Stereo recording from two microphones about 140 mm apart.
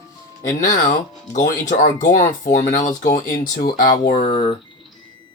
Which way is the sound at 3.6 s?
80° left.